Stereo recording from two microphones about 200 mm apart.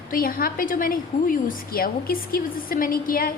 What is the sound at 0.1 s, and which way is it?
A woman's voice, 45° left (ahead or behind).